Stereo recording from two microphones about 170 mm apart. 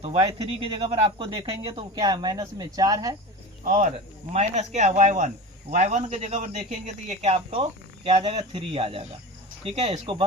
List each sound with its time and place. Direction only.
0.0 s speech: 35° right (ahead or behind); by 3.2 s 20° right (ahead or behind)
3.6 s speech: 50° right (ahead or behind); by 10.2 s 30° right (ahead or behind)